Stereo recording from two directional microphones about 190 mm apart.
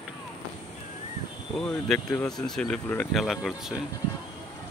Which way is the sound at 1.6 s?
5° left (ahead or behind).